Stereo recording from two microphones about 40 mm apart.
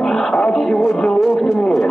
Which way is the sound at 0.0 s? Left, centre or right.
Centre.